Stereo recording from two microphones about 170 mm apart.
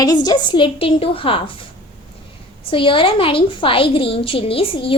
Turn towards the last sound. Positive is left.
turn(degrees=30)  # may be behind; listen again after turning